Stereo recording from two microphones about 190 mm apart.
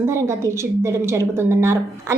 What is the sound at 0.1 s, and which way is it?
A woman's voice, 15° right (ahead or behind).